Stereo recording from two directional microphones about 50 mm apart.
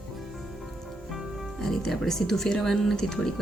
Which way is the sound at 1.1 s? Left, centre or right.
Centre.